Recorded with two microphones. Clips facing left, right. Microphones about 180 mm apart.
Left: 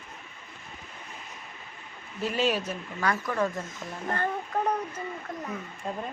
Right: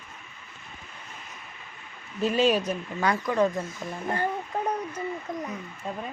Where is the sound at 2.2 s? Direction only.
20° right (ahead or behind).